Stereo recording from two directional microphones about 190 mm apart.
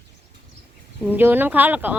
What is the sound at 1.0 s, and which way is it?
Speech, 10° right (ahead or behind).